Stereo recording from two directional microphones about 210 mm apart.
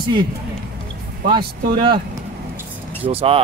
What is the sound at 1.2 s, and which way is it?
Speech, 25° right (ahead or behind).